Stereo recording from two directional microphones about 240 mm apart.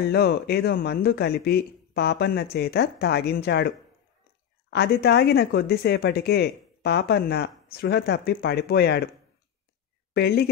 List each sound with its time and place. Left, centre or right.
0.1 s speech: left
10.1 s speech: left